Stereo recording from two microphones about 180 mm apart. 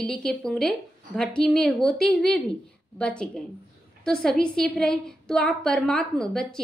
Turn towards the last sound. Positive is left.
turn(degrees=5)  # may be behind; listen again after turning